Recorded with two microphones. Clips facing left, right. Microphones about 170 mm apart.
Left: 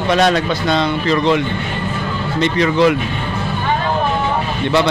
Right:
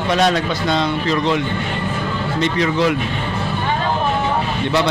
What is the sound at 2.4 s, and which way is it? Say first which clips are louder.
Speech: left 4 dB; 75° left (ahead or behind).